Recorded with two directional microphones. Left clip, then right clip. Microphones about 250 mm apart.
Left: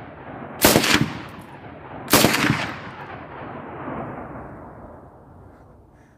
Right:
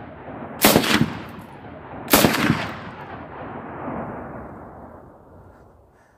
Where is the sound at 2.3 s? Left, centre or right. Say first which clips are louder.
Left 1 dB; left.